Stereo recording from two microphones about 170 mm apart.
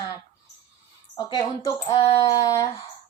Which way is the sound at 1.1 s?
25° left (ahead or behind).